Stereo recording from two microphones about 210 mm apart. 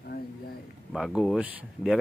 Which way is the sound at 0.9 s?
Centre (ahead or behind).